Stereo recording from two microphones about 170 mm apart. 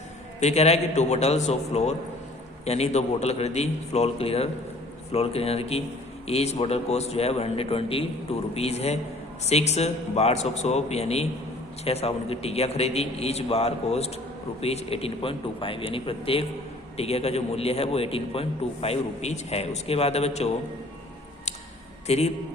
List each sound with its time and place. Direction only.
0.3 s a man's voice: 40° left (ahead or behind)
22.0 s a man's voice: 40° left (ahead or behind)